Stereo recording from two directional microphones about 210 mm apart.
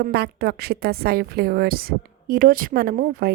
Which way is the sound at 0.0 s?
50° right (ahead or behind).